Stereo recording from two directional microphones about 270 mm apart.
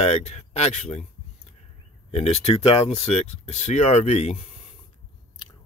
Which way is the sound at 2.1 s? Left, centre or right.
Left.